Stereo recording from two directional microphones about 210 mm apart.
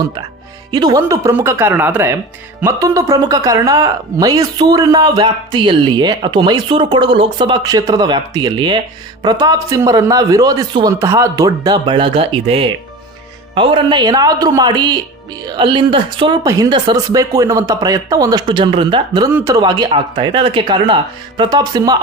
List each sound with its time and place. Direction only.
0.7 s speech: 20° right (ahead or behind)